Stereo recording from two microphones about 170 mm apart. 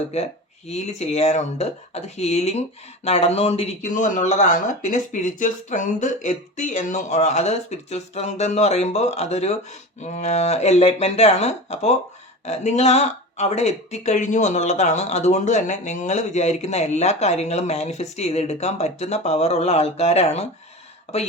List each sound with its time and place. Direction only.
0.1 s speech: 40° left (ahead or behind)